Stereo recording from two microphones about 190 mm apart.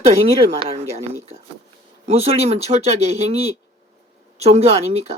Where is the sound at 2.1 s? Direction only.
30° right (ahead or behind).